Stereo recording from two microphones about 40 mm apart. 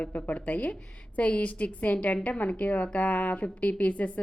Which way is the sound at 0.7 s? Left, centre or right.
Left.